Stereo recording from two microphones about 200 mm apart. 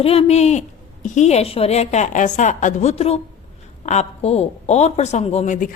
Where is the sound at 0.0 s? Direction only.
30° left (ahead or behind).